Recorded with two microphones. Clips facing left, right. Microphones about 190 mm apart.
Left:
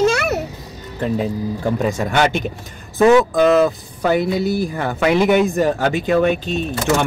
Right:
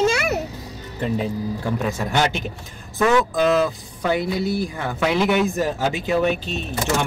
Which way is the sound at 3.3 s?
55° left (ahead or behind).